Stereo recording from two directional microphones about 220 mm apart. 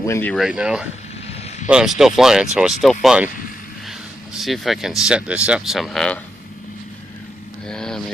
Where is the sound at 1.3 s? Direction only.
30° left (ahead or behind).